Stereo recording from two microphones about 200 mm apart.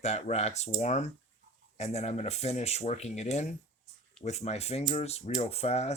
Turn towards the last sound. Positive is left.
turn(degrees=35)  # may be behind; listen again after turning